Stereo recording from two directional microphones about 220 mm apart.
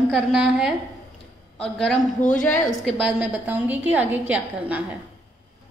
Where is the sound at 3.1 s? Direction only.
5° right (ahead or behind).